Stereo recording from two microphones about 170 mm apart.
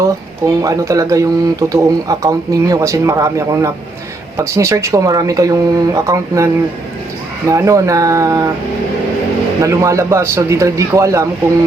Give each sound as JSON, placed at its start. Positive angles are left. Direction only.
{"t": 0.6, "sound": "speech", "side_deg": -20}
{"t": 9.6, "sound": "speech", "side_deg": -20}